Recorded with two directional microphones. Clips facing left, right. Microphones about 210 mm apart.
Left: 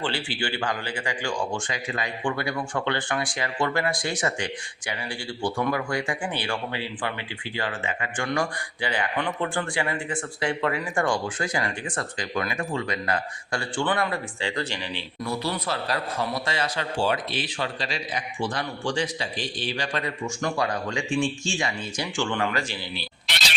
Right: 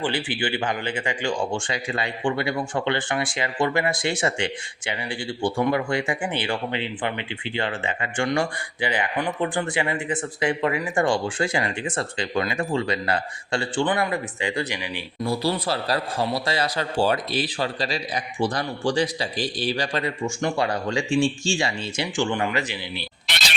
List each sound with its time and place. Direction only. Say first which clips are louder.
0.0 s speech: right 3 dB; 20° right (ahead or behind)
15.2 s speech: right 5 dB; 30° right (ahead or behind)
22.0 s speech: right 2 dB; 15° right (ahead or behind)
23.0 s a sound: right 1 dB; 55° right (ahead or behind)